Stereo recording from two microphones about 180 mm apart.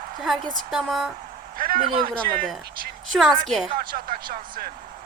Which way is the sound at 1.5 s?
55° right (ahead or behind).